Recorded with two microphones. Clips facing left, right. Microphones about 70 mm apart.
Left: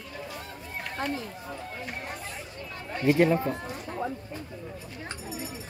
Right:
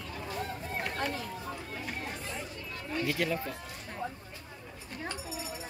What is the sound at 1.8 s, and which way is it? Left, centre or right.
Speech, centre.